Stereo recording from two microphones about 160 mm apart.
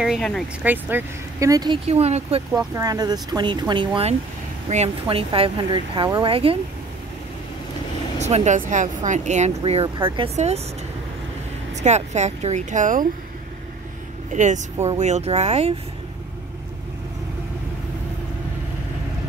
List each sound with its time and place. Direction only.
0.0 s speech: centre (ahead or behind)
0.7 s speech: 10° right (ahead or behind)
1.9 s speech: 40° right (ahead or behind)
2.5 s speech: 20° right (ahead or behind)
4.6 s speech: 40° right (ahead or behind)
8.2 s speech: 45° right (ahead or behind)
10.3 s speech: 45° right (ahead or behind)
11.7 s speech: 45° right (ahead or behind)
14.3 s speech: 50° right (ahead or behind)